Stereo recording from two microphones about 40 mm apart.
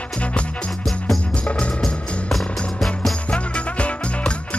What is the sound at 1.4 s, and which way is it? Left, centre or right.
Music, left.